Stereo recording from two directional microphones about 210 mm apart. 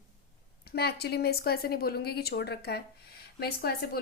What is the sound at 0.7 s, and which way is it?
Speech, 50° left (ahead or behind).